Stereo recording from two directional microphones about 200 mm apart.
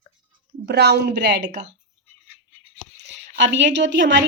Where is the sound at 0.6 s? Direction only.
55° right (ahead or behind).